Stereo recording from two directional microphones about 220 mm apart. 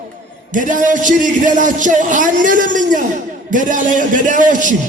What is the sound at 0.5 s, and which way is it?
A man's voice, 35° right (ahead or behind).